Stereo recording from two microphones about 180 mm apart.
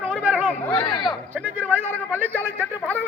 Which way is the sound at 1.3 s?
5° right (ahead or behind).